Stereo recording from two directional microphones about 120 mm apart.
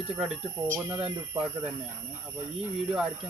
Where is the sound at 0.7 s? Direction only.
20° right (ahead or behind).